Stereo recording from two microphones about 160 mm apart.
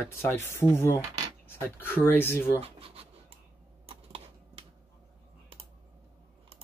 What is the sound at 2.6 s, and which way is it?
Scratch, 35° right (ahead or behind).